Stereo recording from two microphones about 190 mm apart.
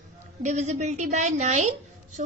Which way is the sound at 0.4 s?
35° right (ahead or behind).